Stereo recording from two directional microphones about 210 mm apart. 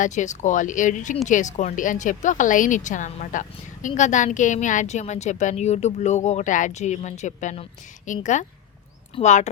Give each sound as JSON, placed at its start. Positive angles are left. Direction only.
{"t": 0.0, "sound": "a woman's voice", "side_deg": 35}